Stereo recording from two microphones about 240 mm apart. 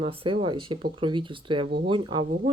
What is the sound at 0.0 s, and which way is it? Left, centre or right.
Speech, right.